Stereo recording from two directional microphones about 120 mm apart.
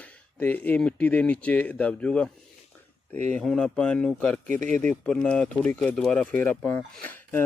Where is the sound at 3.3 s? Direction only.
5° left (ahead or behind).